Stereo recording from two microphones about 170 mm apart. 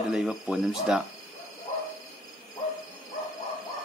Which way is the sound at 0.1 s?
5° right (ahead or behind).